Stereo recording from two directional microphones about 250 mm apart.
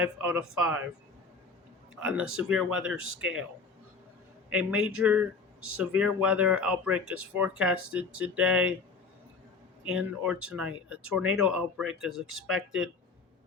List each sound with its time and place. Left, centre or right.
0.0 s speech: centre
2.0 s speech: centre
4.4 s a man's voice: centre
7.0 s speech: right
7.3 s speech: centre
9.8 s speech: centre